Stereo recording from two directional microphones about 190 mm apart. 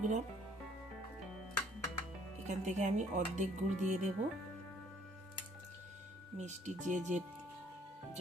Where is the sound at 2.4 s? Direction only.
40° right (ahead or behind).